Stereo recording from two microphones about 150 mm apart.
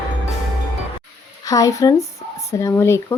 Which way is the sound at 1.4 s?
25° left (ahead or behind).